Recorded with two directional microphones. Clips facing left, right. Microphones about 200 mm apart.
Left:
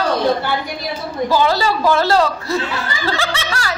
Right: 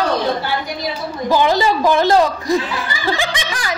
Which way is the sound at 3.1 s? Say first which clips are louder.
Right 1 dB; 15° right (ahead or behind).